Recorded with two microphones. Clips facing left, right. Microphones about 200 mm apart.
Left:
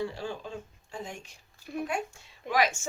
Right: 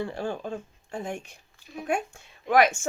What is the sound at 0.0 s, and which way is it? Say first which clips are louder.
A woman's voice: right 3 dB; 55° right (ahead or behind).